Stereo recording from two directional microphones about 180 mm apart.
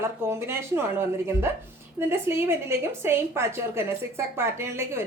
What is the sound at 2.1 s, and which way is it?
A woman's voice, 15° right (ahead or behind).